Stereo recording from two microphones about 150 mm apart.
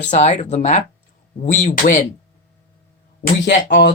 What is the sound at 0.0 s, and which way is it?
Speech, 50° left (ahead or behind).